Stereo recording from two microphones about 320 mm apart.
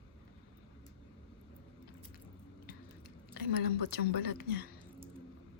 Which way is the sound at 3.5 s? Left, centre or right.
Left.